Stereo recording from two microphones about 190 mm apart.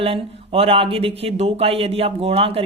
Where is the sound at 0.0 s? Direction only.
30° right (ahead or behind).